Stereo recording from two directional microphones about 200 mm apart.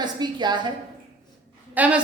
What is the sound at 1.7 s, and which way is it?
Speech, 5° right (ahead or behind).